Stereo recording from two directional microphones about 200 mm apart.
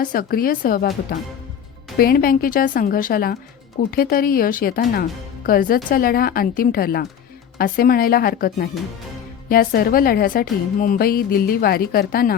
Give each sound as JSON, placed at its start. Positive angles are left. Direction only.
{"t": 0.0, "sound": "speech", "side_deg": 45}
{"t": 2.0, "sound": "speech", "side_deg": 50}